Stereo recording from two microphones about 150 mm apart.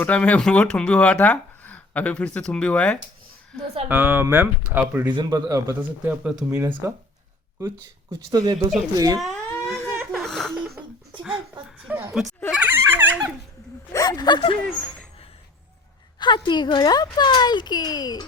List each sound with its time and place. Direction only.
0.0 s speech: 10° left (ahead or behind)
3.8 s speech: 10° right (ahead or behind)
5.1 s a man's voice: 25° right (ahead or behind)
8.3 s a man's voice: 25° right (ahead or behind)
9.2 s a sound: centre (ahead or behind)
9.9 s a sound: 10° right (ahead or behind)
10.2 s laughter: centre (ahead or behind)
11.9 s a sound: 15° right (ahead or behind)
12.5 s goat: 10° right (ahead or behind)
12.8 s dog: 15° right (ahead or behind)
13.9 s speech: 25° left (ahead or behind)
16.2 s speech: 30° left (ahead or behind)